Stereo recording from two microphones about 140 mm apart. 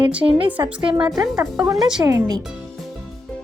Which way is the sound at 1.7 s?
Centre (ahead or behind).